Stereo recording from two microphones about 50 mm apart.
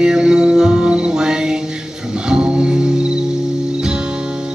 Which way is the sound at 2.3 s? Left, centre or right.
Centre.